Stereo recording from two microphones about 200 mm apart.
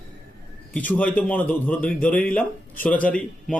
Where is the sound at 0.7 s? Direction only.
5° left (ahead or behind).